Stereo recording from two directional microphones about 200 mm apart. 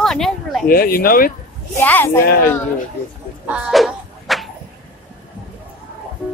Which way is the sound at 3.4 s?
5° right (ahead or behind).